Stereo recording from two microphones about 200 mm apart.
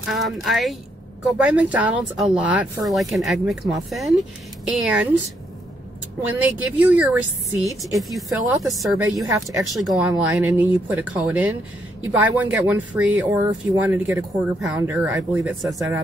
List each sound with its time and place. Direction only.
0.0 s speech: centre (ahead or behind)
6.4 s speech: 5° right (ahead or behind)
9.3 s speech: 15° right (ahead or behind)
9.7 s speech: centre (ahead or behind)